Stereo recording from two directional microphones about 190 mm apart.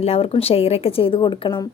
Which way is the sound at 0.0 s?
30° left (ahead or behind).